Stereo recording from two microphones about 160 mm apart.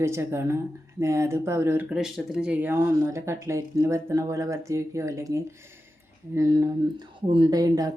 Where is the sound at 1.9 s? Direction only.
Centre (ahead or behind).